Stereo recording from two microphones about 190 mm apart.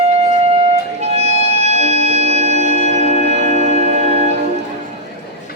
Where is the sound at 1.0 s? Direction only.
35° right (ahead or behind).